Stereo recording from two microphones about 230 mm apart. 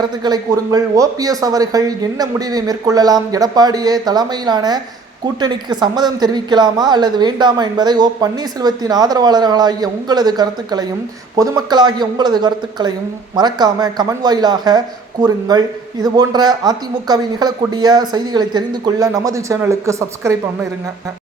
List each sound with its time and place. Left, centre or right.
0.0 s a man's voice: centre